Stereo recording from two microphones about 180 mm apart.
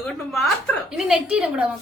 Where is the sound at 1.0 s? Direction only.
5° right (ahead or behind).